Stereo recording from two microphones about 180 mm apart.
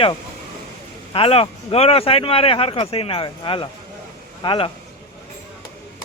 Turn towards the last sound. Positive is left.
turn(degrees=25)  # may be behind; listen again after turning